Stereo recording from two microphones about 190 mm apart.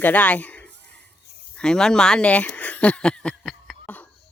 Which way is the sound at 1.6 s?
5° left (ahead or behind).